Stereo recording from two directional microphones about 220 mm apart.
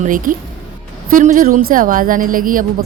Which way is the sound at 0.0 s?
35° right (ahead or behind).